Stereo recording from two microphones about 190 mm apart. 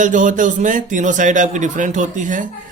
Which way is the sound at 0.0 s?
40° right (ahead or behind).